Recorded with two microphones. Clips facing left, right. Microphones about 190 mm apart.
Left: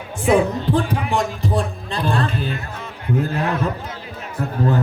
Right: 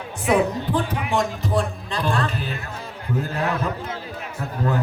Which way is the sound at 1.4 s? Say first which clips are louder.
Left 1 dB; 30° left (ahead or behind).